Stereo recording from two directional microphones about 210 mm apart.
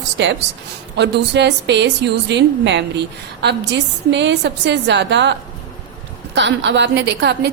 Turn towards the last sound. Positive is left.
turn(degrees=-55)  # may be behind; listen again after turning